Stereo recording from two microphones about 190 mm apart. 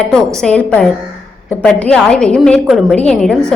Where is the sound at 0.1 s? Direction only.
5° left (ahead or behind).